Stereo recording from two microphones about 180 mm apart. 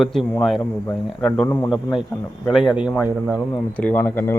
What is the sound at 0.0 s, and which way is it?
A man's voice, centre (ahead or behind).